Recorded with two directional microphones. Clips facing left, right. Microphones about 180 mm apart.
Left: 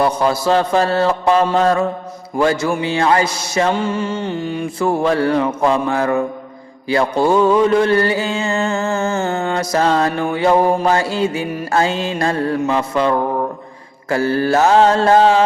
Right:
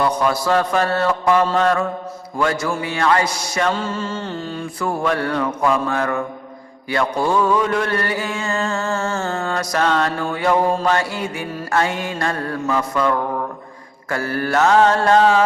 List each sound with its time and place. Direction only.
0.0 s mantra: 25° left (ahead or behind)